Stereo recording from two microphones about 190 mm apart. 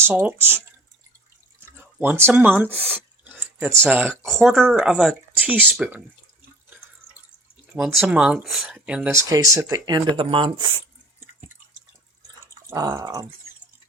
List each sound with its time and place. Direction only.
0.0 s speech: 10° right (ahead or behind)
4.3 s speech: centre (ahead or behind)
7.8 s speech: 5° right (ahead or behind); by 10.8 s 25° right (ahead or behind)
12.6 s dog: 15° right (ahead or behind)